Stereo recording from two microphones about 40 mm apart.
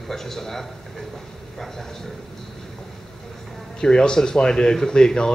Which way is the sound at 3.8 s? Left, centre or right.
Left.